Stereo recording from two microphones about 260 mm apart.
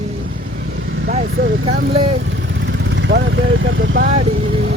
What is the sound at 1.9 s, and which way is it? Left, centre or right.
Speech, right.